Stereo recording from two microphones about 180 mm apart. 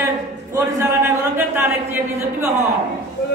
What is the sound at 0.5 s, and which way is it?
Speech, 10° right (ahead or behind).